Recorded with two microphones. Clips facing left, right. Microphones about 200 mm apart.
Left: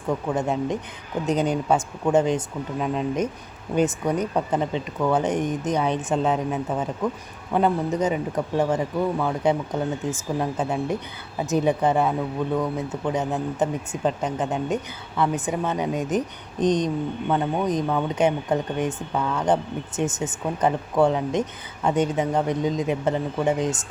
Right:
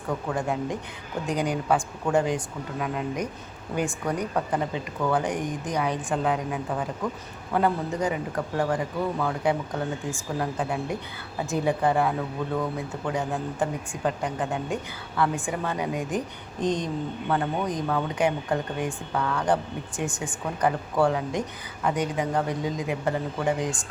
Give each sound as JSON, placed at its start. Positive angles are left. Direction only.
{"t": 0.3, "sound": "a woman's voice", "side_deg": 20}